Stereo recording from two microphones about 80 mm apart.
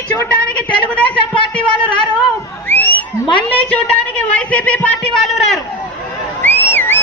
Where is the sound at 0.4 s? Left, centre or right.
Centre.